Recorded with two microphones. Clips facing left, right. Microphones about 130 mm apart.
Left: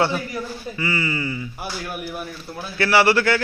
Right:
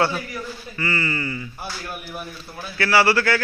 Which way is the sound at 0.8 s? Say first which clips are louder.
Even; 15° left (ahead or behind).